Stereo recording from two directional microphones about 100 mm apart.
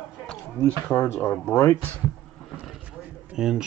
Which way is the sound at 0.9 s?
25° left (ahead or behind).